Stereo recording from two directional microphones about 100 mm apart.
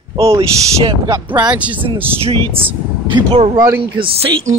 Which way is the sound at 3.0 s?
55° right (ahead or behind).